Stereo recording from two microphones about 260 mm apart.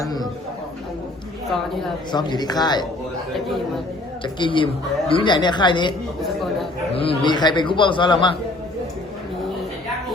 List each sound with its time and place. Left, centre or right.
0.0 s a sound: centre
2.1 s a woman's voice: centre
4.2 s a woman's voice: centre
6.9 s a woman's voice: left